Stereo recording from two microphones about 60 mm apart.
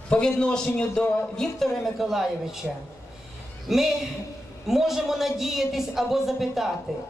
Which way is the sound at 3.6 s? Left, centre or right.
Centre.